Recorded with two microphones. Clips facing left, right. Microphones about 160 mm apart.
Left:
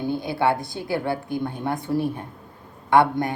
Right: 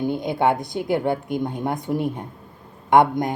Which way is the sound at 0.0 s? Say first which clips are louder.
Right 2 dB; 20° right (ahead or behind).